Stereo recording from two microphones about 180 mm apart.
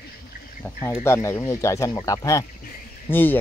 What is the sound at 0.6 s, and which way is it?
Speech, 15° left (ahead or behind).